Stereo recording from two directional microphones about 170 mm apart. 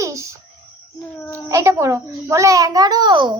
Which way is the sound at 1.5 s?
15° right (ahead or behind).